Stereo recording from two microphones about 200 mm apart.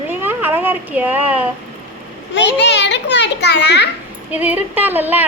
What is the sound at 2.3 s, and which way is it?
A child's voice, 65° left (ahead or behind).